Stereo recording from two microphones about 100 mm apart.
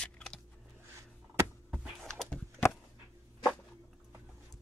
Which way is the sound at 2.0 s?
5° left (ahead or behind).